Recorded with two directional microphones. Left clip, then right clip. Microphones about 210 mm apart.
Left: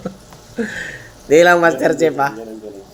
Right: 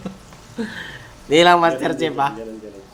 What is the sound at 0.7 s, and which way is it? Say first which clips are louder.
Speech: left 6 dB; 50° right (ahead or behind).